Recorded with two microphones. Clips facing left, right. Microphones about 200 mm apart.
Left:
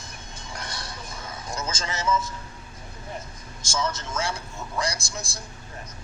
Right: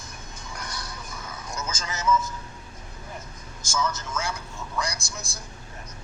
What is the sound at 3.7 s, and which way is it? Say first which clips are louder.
Speech: even; 30° left (ahead or behind).